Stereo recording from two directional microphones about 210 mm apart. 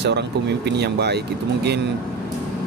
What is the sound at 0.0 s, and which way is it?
Speech, 55° right (ahead or behind).